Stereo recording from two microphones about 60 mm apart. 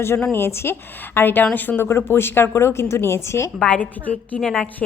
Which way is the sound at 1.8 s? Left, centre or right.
Left.